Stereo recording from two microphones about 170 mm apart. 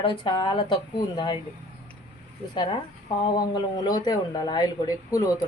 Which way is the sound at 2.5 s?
25° left (ahead or behind).